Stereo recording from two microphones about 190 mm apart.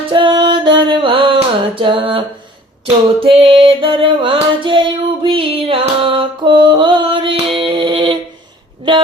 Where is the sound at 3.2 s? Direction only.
30° right (ahead or behind).